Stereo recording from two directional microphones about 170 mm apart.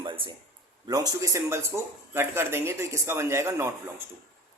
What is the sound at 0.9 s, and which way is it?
Speech, 20° right (ahead or behind).